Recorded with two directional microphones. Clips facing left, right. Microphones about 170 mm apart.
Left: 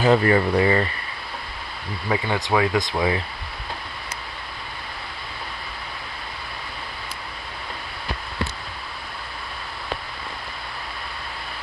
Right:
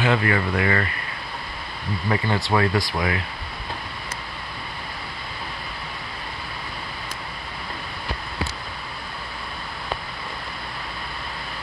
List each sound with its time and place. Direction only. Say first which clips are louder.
0.0 s speech: left 4 dB; 35° left (ahead or behind)
2.0 s speech: even; 15° left (ahead or behind)